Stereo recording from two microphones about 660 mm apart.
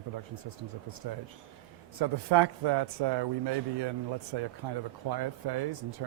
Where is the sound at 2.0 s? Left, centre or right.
Right.